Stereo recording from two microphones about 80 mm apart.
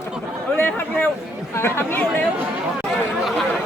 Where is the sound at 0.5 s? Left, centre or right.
Left.